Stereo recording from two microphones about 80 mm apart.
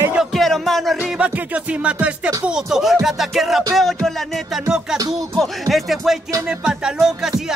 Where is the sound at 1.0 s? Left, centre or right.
Centre.